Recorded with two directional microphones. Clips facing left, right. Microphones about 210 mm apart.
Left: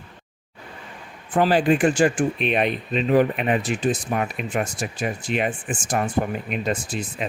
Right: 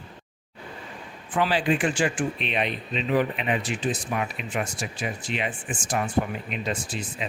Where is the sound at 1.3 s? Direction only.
45° left (ahead or behind).